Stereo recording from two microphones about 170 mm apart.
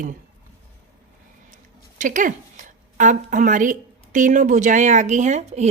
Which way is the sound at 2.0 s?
50° right (ahead or behind).